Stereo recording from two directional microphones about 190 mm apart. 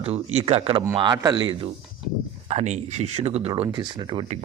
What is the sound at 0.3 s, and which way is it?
Speech, 30° right (ahead or behind).